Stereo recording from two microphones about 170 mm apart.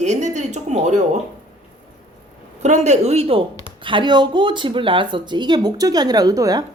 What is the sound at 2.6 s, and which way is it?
Speech, 45° right (ahead or behind).